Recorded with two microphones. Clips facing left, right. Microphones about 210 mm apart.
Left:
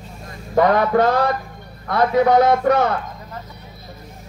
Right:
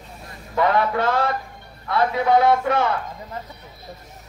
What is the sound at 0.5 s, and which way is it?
A man's voice, 45° left (ahead or behind).